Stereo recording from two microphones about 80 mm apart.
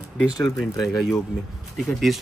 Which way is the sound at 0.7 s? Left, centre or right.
Left.